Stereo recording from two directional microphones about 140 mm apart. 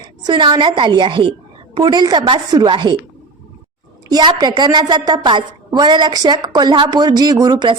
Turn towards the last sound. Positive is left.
turn(degrees=-30)  # may be behind; listen again after turning